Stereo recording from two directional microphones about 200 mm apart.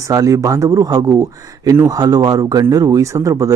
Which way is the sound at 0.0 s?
15° right (ahead or behind).